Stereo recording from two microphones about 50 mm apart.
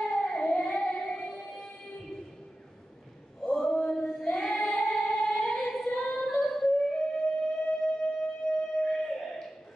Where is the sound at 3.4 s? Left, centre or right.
Centre.